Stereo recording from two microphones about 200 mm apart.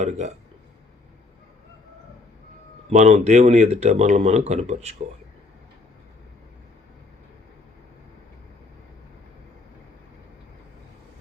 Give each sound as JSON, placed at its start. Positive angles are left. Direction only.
{"t": 0.0, "sound": "speech", "side_deg": -35}
{"t": 2.9, "sound": "speech", "side_deg": -35}